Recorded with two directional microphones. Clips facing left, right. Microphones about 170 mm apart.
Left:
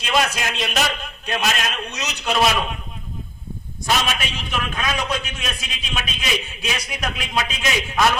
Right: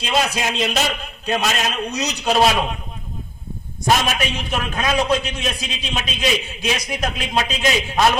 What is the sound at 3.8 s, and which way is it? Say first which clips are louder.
A man's voice: right 4 dB; 40° right (ahead or behind).